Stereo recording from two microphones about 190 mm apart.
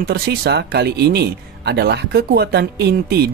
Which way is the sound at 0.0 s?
55° right (ahead or behind).